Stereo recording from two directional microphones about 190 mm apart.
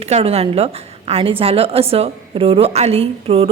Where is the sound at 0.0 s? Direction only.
30° right (ahead or behind).